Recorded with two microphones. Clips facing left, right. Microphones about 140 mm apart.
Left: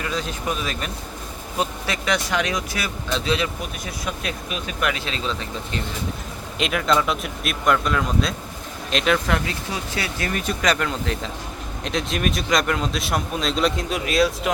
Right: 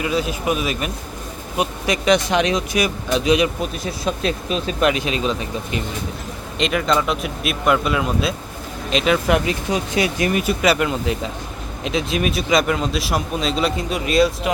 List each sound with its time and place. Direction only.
0.0 s speech: 10° right (ahead or behind)
3.8 s speech: 30° right (ahead or behind)
6.6 s a man's voice: centre (ahead or behind)
9.2 s a man's voice: 15° right (ahead or behind); by 14.5 s centre (ahead or behind)